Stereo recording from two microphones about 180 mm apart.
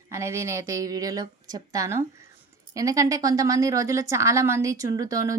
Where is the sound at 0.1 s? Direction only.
15° right (ahead or behind).